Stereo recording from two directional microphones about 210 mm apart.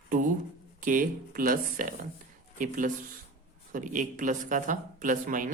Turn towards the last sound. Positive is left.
turn(degrees=-40)  # may be behind; listen again after turning